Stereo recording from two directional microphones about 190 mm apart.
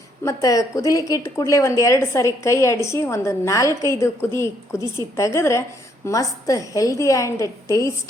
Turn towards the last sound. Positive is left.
turn(degrees=15)  # may be behind; listen again after turning